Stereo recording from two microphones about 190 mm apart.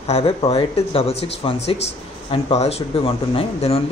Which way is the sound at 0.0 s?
35° left (ahead or behind).